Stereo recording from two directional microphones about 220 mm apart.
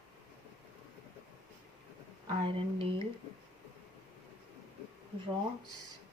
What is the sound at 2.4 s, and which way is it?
Speech, 25° right (ahead or behind).